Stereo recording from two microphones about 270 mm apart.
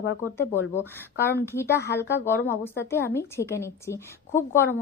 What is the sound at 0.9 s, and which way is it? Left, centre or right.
Speech, centre.